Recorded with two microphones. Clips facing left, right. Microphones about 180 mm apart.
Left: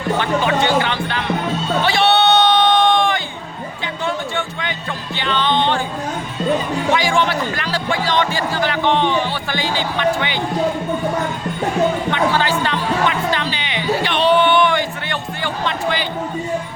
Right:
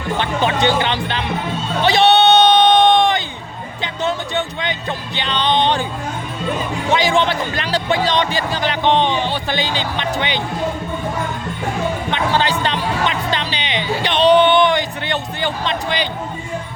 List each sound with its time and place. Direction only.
0.2 s a man's voice: 25° right (ahead or behind)
1.8 s music: 20° right (ahead or behind)
5.1 s a man's voice: 20° right (ahead or behind)
6.9 s a man's voice: 20° right (ahead or behind)
12.1 s speech: 20° right (ahead or behind)